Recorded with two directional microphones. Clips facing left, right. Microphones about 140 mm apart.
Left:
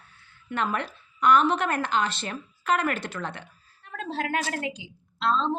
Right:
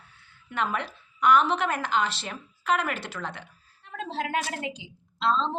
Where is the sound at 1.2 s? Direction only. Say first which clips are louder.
Left 1 dB; 10° right (ahead or behind).